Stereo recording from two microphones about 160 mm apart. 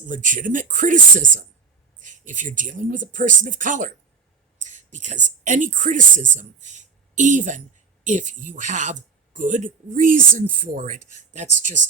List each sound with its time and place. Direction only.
0.0 s speech: 55° right (ahead or behind)